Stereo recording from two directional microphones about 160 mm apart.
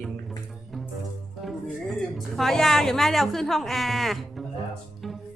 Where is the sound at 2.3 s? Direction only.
Centre (ahead or behind).